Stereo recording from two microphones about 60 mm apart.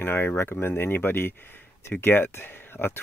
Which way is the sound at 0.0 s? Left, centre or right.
Left.